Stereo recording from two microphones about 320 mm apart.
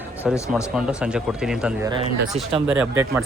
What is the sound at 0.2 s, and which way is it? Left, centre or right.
Speech, centre.